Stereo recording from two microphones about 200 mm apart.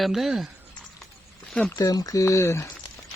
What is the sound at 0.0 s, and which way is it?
Speech, centre (ahead or behind).